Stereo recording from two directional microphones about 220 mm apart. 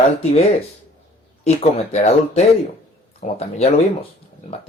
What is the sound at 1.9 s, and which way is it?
Speech, 30° left (ahead or behind).